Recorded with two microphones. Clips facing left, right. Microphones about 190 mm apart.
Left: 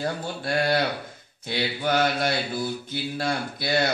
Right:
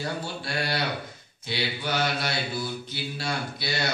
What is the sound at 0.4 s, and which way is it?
Mantra, 50° left (ahead or behind).